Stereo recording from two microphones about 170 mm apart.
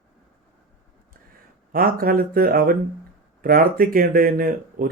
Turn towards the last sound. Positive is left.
turn(degrees=-60)  # may be behind; listen again after turning